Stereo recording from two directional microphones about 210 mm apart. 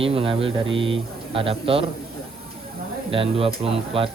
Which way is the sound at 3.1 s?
25° right (ahead or behind).